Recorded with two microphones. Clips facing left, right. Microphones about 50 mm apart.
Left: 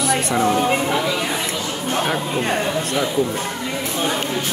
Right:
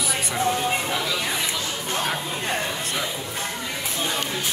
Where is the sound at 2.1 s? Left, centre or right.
Left.